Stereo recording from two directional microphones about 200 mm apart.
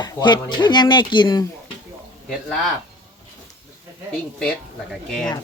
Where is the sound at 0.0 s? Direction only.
20° left (ahead or behind).